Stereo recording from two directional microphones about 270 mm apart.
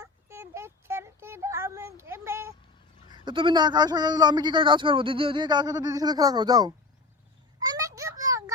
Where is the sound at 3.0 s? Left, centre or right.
Centre.